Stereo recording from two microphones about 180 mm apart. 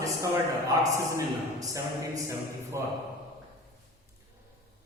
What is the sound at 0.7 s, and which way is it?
A man's voice, 20° right (ahead or behind).